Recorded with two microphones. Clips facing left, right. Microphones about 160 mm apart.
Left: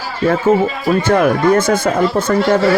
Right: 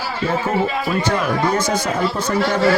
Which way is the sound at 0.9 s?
55° left (ahead or behind).